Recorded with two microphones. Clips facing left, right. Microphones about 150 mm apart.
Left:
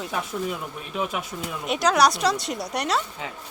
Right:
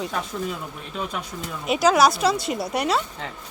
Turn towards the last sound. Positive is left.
turn(degrees=0)  # may be behind; listen again after turning